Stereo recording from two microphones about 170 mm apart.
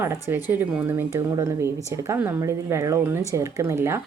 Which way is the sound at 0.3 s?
10° right (ahead or behind).